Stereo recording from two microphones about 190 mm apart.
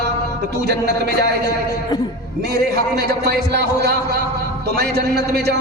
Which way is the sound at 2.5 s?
60° right (ahead or behind).